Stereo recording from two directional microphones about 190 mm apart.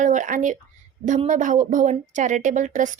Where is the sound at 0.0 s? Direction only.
40° right (ahead or behind).